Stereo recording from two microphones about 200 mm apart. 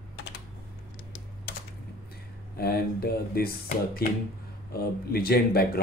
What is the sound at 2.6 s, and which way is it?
Speech, 50° left (ahead or behind).